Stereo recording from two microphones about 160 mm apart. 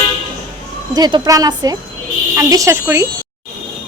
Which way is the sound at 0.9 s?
25° right (ahead or behind).